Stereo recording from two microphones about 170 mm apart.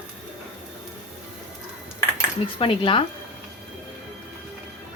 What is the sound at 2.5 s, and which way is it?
Speech, 30° left (ahead or behind).